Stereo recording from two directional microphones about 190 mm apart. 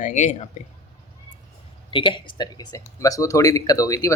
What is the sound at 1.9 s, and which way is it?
Speech, 25° left (ahead or behind).